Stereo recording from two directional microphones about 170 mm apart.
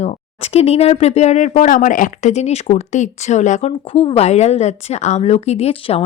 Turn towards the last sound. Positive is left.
turn(degrees=35)  # may be behind; listen again after turning